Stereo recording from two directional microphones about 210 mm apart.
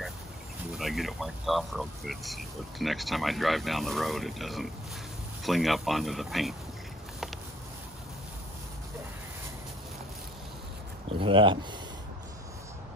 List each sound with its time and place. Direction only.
0.7 s speech: centre (ahead or behind)
11.1 s speech: 25° right (ahead or behind)